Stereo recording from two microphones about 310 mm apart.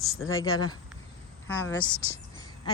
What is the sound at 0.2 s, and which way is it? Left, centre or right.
Speech, left.